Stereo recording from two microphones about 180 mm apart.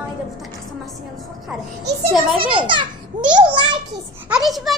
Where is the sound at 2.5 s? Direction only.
25° right (ahead or behind).